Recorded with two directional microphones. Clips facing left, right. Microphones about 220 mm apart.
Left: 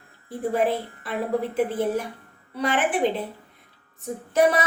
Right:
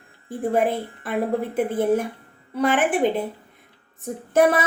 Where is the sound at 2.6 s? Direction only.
50° right (ahead or behind).